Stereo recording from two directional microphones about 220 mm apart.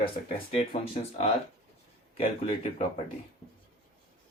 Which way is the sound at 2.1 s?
30° left (ahead or behind).